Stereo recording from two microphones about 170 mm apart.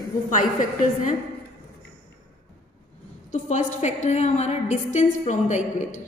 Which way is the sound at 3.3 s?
45° left (ahead or behind).